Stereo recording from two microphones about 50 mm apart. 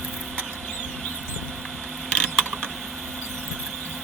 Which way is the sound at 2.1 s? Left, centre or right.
Left.